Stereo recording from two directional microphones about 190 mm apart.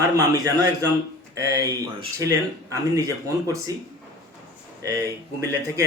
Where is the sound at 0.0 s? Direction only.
20° right (ahead or behind).